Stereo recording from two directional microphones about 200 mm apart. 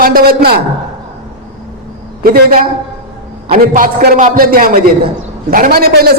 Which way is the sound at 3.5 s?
45° right (ahead or behind).